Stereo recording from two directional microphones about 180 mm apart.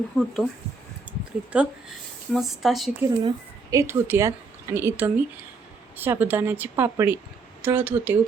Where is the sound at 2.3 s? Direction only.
Centre (ahead or behind).